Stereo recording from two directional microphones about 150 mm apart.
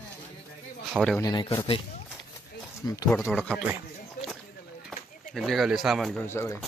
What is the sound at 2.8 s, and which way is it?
Speech, 25° left (ahead or behind).